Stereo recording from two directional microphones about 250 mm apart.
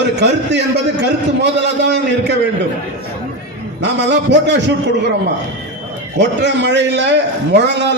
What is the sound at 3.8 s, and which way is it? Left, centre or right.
Speech, right.